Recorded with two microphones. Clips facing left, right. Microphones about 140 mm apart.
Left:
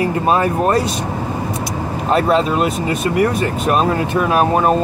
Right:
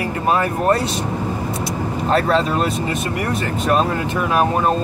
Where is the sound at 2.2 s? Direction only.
15° left (ahead or behind).